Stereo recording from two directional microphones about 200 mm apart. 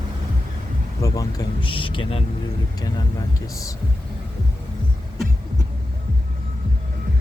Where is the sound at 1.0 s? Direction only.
15° left (ahead or behind).